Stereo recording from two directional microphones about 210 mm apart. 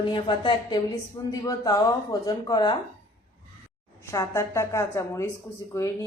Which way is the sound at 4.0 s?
15° left (ahead or behind).